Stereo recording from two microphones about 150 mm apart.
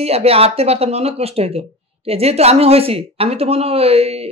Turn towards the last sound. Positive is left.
turn(degrees=-40)  # may be behind; listen again after turning